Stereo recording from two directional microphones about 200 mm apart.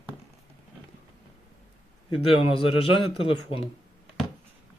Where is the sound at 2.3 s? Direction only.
25° left (ahead or behind).